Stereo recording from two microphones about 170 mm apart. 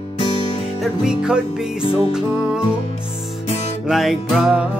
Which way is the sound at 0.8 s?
5° right (ahead or behind).